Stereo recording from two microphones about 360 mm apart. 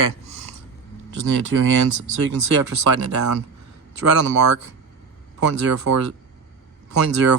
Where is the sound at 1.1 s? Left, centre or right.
Right.